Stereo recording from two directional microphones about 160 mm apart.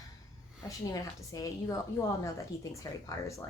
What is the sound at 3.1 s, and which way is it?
Speech, 20° left (ahead or behind).